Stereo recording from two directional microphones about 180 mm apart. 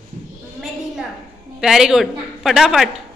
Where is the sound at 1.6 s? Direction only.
5° right (ahead or behind).